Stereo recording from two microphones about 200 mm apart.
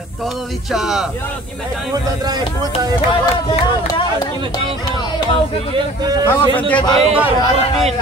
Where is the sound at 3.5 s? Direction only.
25° left (ahead or behind).